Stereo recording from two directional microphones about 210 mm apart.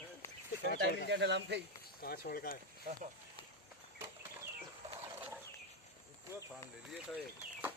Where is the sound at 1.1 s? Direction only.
55° right (ahead or behind).